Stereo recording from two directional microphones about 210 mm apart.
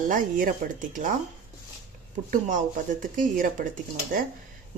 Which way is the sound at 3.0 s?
40° right (ahead or behind).